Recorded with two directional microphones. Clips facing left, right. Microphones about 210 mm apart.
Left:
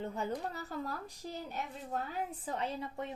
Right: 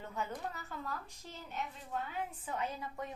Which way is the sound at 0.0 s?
35° left (ahead or behind).